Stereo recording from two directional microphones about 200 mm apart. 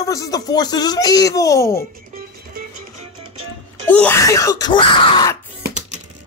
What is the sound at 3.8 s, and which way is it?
Speech, 10° left (ahead or behind).